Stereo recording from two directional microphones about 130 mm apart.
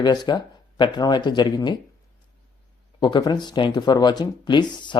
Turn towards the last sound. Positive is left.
turn(degrees=35)  # may be behind; listen again after turning